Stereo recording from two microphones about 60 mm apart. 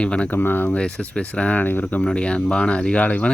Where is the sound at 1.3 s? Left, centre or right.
Left.